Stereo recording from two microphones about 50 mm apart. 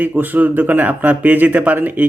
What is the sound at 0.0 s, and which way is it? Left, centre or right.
Speech, right.